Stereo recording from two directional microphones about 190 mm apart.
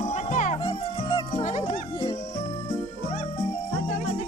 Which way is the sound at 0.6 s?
25° left (ahead or behind).